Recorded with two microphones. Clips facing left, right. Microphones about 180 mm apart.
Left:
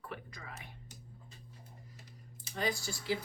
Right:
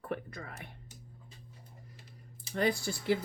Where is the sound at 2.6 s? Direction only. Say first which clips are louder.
Right 5 dB; 60° right (ahead or behind).